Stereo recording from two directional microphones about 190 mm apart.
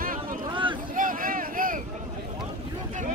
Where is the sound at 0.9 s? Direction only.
45° right (ahead or behind).